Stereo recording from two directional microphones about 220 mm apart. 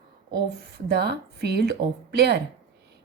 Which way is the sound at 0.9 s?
50° right (ahead or behind).